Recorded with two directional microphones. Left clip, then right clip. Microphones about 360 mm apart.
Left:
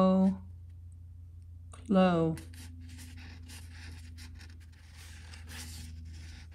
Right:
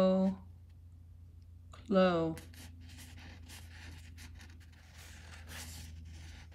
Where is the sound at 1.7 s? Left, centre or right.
Centre.